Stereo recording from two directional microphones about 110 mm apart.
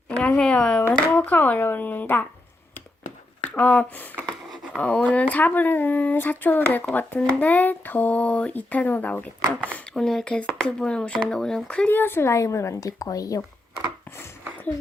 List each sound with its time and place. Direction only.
0.2 s speech: 10° left (ahead or behind)
3.5 s speech: 10° left (ahead or behind)
4.3 s a sound: 5° left (ahead or behind)
4.8 s speech: 10° left (ahead or behind)
9.9 s speech: 5° left (ahead or behind); by 13.4 s 30° left (ahead or behind)